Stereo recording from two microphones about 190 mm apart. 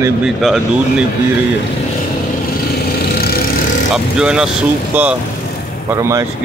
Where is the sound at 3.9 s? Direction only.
5° right (ahead or behind).